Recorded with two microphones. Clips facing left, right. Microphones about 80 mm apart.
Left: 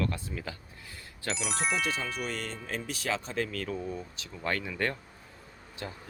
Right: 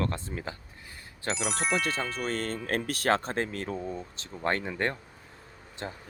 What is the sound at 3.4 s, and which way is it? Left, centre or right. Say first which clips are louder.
Speech: right 1 dB; right.